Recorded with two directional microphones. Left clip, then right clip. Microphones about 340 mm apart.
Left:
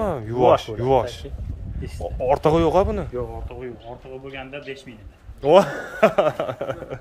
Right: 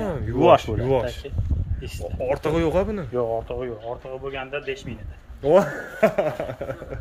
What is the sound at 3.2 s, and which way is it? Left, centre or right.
Speech, centre.